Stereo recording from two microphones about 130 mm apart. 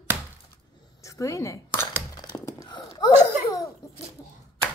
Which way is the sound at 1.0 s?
25° left (ahead or behind).